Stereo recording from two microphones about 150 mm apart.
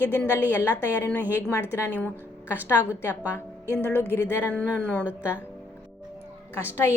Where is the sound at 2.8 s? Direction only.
10° right (ahead or behind).